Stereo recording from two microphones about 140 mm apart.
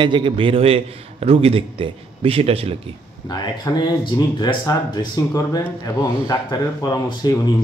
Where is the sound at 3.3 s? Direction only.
30° left (ahead or behind).